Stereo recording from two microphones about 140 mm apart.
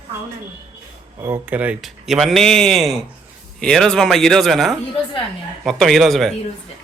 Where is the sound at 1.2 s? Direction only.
15° right (ahead or behind).